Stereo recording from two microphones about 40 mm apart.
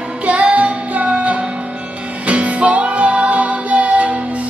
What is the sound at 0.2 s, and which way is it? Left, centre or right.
Music, right.